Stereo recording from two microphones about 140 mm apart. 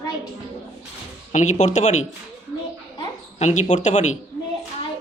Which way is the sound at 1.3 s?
60° left (ahead or behind).